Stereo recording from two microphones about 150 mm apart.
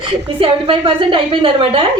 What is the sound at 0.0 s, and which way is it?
A woman's voice, 35° right (ahead or behind).